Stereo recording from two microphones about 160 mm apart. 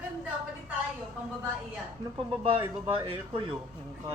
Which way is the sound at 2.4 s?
35° right (ahead or behind).